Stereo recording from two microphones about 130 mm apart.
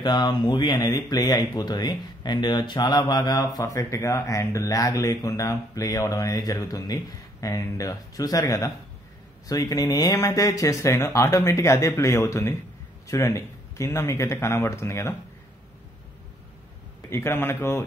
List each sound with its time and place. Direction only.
0.0 s speech: 35° left (ahead or behind)
17.1 s speech: 20° left (ahead or behind)